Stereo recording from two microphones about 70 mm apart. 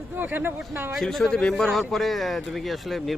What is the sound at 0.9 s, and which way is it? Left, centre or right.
Speech, centre.